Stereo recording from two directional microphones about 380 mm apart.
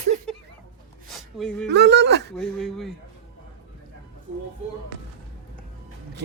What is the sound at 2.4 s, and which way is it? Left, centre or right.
Speech, centre.